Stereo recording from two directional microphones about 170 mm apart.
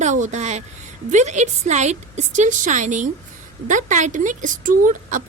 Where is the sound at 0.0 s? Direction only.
45° right (ahead or behind).